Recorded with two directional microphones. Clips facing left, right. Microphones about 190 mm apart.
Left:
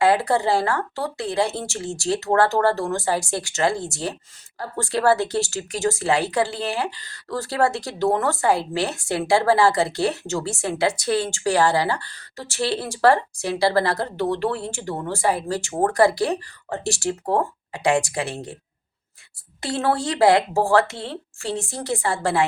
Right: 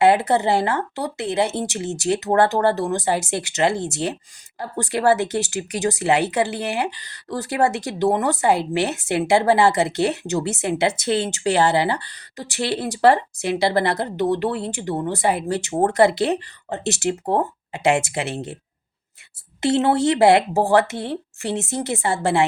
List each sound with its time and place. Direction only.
0.0 s speech: 20° right (ahead or behind)
19.6 s speech: 20° right (ahead or behind)